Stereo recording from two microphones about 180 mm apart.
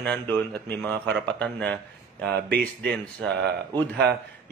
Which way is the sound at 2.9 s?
5° left (ahead or behind).